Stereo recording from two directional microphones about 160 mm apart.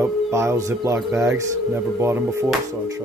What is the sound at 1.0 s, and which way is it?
Speech, 5° right (ahead or behind).